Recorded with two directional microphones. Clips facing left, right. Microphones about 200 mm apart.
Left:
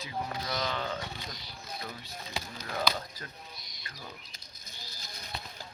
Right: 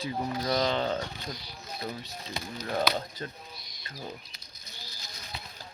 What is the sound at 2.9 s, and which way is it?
Speech, 25° right (ahead or behind).